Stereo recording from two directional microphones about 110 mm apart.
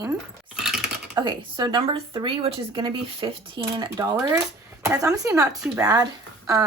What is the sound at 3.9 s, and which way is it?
Speech, 30° right (ahead or behind).